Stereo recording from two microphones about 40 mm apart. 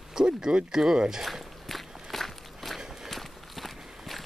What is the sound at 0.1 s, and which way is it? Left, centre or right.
Speech, centre.